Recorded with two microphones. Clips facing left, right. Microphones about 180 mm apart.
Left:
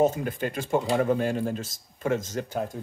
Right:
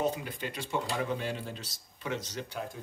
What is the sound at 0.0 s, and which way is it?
Speech, 45° left (ahead or behind).